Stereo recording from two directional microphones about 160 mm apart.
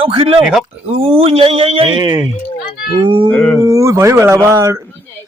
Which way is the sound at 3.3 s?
5° left (ahead or behind).